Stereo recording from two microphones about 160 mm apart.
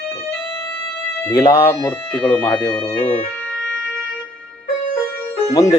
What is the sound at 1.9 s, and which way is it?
Speech, 10° left (ahead or behind).